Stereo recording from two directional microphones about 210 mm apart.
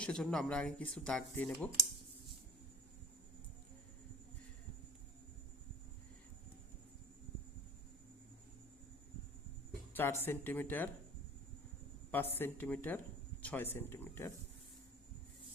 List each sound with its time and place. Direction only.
0.0 s speech: 5° left (ahead or behind)
9.9 s speech: 10° left (ahead or behind)
12.1 s speech: 10° left (ahead or behind)